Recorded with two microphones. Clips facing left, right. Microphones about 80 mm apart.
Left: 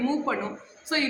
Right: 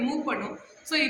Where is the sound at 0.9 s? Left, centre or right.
Left.